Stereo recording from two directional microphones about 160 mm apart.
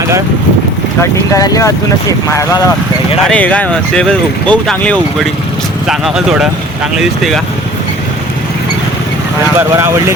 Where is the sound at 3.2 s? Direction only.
5° left (ahead or behind).